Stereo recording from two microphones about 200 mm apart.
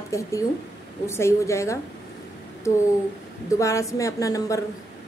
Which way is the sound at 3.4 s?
15° left (ahead or behind).